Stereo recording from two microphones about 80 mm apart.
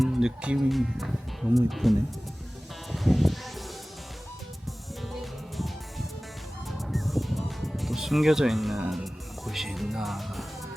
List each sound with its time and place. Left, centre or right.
0.0 s speech: centre
2.9 s music: centre
5.2 s music: centre